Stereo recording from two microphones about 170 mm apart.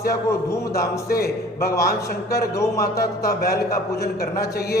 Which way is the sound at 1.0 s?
65° left (ahead or behind).